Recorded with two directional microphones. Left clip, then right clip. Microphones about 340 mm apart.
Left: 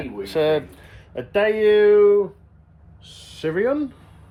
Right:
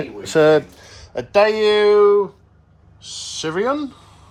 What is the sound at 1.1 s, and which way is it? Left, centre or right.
Speech, centre.